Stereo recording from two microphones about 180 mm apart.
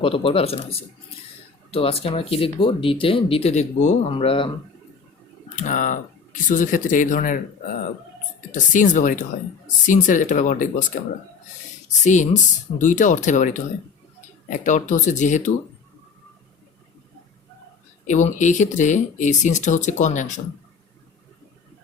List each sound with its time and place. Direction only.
0.0 s speech: 30° left (ahead or behind)
5.5 s speech: 45° left (ahead or behind)
8.5 s speech: 45° left (ahead or behind)
12.0 s speech: 40° left (ahead or behind)
18.0 s speech: 40° left (ahead or behind)